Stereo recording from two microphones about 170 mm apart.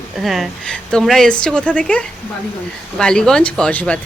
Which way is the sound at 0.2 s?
Centre (ahead or behind).